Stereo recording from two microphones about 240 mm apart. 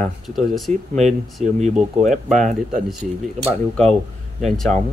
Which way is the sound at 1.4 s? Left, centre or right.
Right.